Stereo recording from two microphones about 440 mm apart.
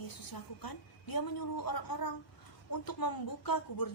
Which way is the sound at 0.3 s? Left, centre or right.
Left.